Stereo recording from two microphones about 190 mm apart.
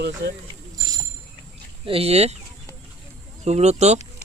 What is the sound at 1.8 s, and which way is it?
Speech, 30° right (ahead or behind).